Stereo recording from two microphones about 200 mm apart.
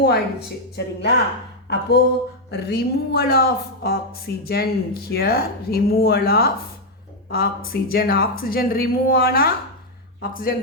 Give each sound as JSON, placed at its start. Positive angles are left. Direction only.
{"t": 0.0, "sound": "speech", "side_deg": 55}